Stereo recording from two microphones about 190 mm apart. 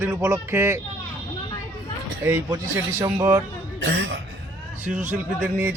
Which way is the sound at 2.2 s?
15° right (ahead or behind).